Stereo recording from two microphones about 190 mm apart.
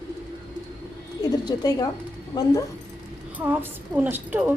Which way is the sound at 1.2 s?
20° left (ahead or behind).